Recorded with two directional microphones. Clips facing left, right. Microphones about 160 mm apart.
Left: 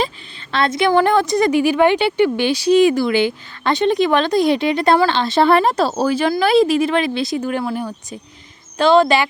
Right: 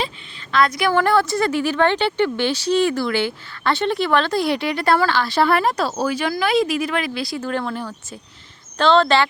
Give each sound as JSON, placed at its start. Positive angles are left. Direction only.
{"t": 0.5, "sound": "a woman's voice", "side_deg": 25}